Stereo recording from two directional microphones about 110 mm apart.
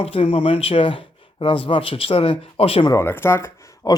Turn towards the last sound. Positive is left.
turn(degrees=35)  # may be behind; listen again after turning